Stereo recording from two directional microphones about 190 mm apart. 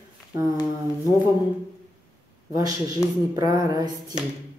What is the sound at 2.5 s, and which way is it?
Speech, 20° right (ahead or behind).